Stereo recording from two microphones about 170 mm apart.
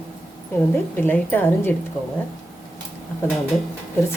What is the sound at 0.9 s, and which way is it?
Speech, 10° left (ahead or behind).